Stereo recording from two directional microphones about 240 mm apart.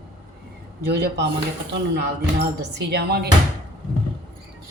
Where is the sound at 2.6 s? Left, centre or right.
Right.